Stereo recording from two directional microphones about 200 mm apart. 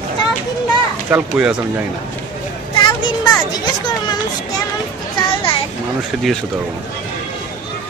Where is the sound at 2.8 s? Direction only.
25° left (ahead or behind).